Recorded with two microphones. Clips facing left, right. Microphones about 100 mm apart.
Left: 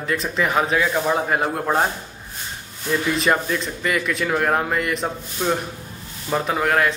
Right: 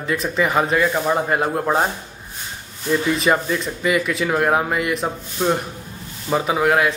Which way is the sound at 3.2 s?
Centre (ahead or behind).